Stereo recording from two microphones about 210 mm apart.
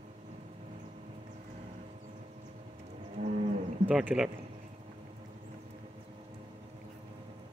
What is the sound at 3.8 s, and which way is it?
Speech, 5° right (ahead or behind).